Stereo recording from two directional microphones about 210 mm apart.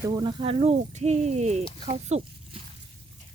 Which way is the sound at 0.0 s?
20° right (ahead or behind).